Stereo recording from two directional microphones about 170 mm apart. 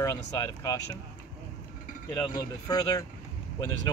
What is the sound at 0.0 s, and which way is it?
Speech, 20° left (ahead or behind).